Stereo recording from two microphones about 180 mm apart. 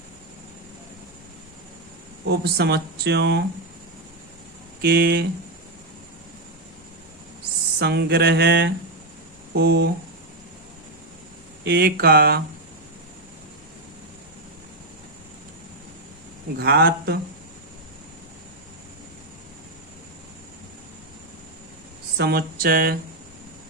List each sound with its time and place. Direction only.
2.3 s speech: 65° right (ahead or behind)
4.8 s speech: 60° right (ahead or behind)
7.8 s speech: 65° right (ahead or behind)
11.6 s speech: 60° right (ahead or behind)
16.6 s speech: 65° right (ahead or behind)
22.2 s speech: 60° right (ahead or behind)